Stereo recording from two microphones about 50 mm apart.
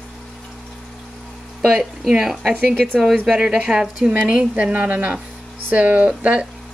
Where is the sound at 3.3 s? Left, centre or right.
Centre.